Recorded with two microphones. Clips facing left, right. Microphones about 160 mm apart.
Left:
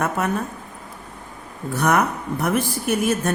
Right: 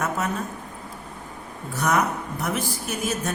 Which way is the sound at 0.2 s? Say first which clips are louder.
Left 4 dB; 60° left (ahead or behind).